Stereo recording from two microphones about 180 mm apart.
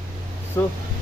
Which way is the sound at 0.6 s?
15° left (ahead or behind).